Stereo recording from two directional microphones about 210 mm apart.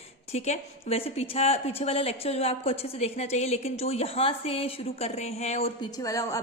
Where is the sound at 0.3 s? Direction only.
30° left (ahead or behind).